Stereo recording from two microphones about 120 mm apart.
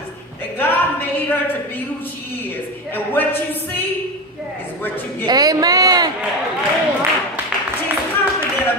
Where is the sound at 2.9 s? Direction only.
15° left (ahead or behind).